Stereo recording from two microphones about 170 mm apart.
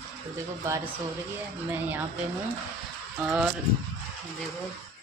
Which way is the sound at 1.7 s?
10° right (ahead or behind).